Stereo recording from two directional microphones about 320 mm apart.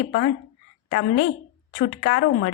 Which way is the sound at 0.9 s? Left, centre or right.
Left.